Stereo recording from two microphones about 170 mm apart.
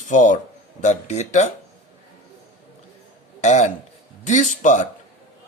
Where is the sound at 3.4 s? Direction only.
45° left (ahead or behind).